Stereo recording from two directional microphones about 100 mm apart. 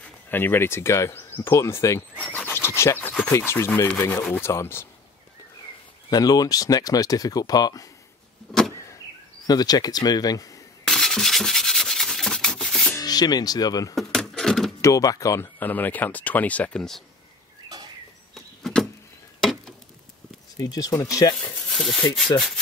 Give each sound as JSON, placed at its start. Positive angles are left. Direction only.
{"t": 0.3, "sound": "speech", "side_deg": 20}
{"t": 2.3, "sound": "a sound", "side_deg": 20}
{"t": 3.3, "sound": "speech", "side_deg": 25}
{"t": 6.0, "sound": "speech", "side_deg": 40}
{"t": 9.5, "sound": "speech", "side_deg": 40}
{"t": 10.9, "sound": "rub", "side_deg": 5}
{"t": 12.9, "sound": "speech", "side_deg": 40}
{"t": 13.9, "sound": "a sound", "side_deg": 5}
{"t": 14.8, "sound": "speech", "side_deg": 35}
{"t": 15.6, "sound": "speech", "side_deg": 20}
{"t": 18.3, "sound": "power windows", "side_deg": 5}
{"t": 19.4, "sound": "a sound", "side_deg": 5}
{"t": 20.5, "sound": "speech", "side_deg": 40}
{"t": 21.6, "sound": "a sound", "side_deg": 5}